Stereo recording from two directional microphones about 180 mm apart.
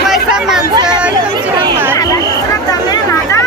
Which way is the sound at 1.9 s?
20° left (ahead or behind).